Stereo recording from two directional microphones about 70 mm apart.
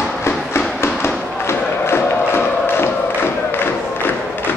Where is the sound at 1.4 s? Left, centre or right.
Left.